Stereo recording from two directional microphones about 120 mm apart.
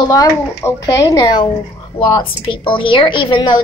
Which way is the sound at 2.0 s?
45° left (ahead or behind).